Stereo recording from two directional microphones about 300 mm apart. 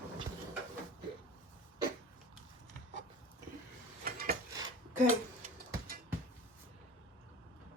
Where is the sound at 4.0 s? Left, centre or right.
Right.